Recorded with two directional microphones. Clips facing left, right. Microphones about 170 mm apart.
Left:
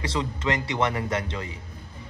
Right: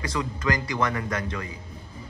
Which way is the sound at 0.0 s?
25° left (ahead or behind).